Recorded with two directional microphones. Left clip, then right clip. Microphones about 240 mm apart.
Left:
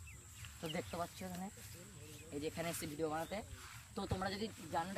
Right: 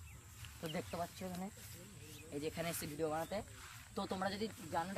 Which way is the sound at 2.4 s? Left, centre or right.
Centre.